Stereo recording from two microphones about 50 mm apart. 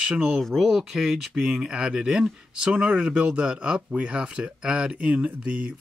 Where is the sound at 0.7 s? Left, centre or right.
Centre.